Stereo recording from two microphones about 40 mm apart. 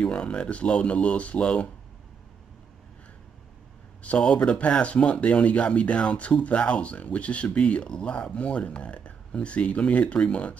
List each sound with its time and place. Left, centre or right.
0.0 s speech: left
4.0 s speech: left